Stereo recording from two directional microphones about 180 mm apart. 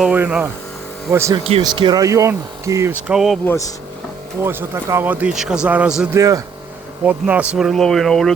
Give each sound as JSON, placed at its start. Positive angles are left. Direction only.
{"t": 0.0, "sound": "speech", "side_deg": -10}
{"t": 1.5, "sound": "speech", "side_deg": -30}
{"t": 3.4, "sound": "speech", "side_deg": 15}
{"t": 4.4, "sound": "speech", "side_deg": -15}
{"t": 6.1, "sound": "speech", "side_deg": -20}